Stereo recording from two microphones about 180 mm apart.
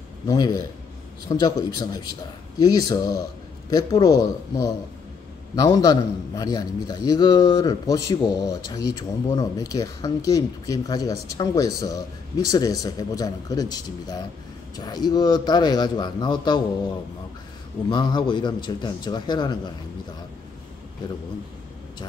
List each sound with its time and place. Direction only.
0.3 s speech: 20° left (ahead or behind)
17.8 s speech: 25° left (ahead or behind)